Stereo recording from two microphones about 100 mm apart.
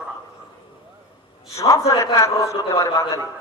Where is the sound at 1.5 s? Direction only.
30° left (ahead or behind).